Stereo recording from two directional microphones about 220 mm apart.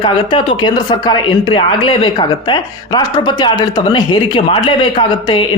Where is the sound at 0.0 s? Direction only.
20° left (ahead or behind).